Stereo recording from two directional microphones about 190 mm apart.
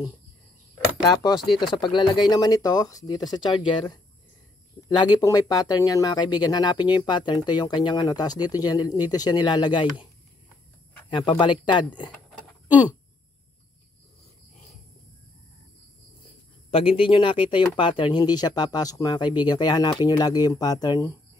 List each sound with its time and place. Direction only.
1.0 s speech: 20° left (ahead or behind)
11.1 s speech: 25° left (ahead or behind)
12.1 s a sound: 5° left (ahead or behind)
16.7 s speech: 30° left (ahead or behind)